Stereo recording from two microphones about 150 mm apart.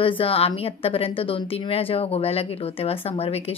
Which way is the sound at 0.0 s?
35° left (ahead or behind).